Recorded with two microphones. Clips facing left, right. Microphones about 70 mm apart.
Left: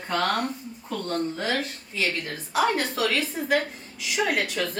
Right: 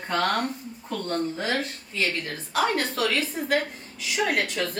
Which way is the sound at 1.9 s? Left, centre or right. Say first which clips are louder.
Even; centre.